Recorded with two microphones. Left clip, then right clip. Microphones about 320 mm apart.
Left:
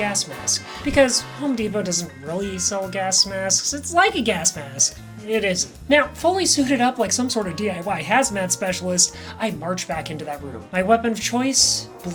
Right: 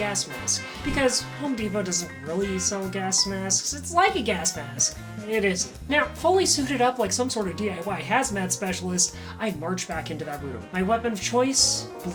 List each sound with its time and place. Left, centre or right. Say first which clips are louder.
0.1 s a woman's voice: left 4 dB; left